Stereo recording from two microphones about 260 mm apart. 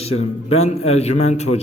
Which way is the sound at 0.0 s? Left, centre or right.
Left.